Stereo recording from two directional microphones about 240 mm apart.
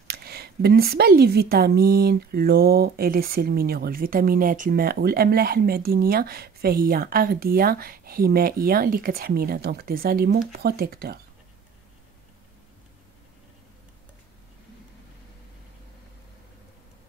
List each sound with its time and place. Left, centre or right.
0.1 s a woman's voice: right